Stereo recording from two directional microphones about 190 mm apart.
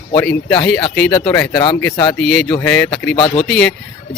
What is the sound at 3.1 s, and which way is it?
Speech, 30° left (ahead or behind).